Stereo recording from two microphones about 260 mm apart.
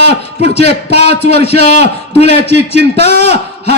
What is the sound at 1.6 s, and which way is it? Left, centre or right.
Speech, right.